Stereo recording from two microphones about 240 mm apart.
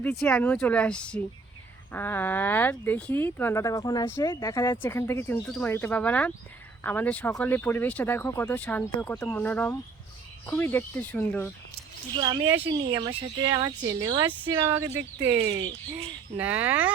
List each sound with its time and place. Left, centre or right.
0.0 s speech: centre
12.1 s speech: centre
16.4 s speech: centre